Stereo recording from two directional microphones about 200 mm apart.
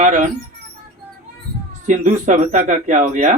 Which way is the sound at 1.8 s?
40° right (ahead or behind).